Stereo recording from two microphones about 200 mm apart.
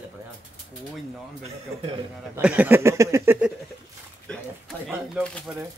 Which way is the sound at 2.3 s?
5° right (ahead or behind).